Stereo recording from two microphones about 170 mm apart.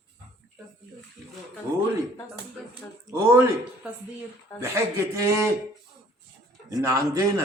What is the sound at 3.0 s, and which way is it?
Speech, 15° right (ahead or behind).